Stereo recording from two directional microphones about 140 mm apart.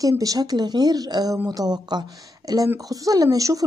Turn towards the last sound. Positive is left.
turn(degrees=-25)  # may be behind; listen again after turning